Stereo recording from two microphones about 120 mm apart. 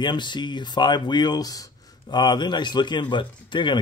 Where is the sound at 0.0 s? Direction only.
40° left (ahead or behind).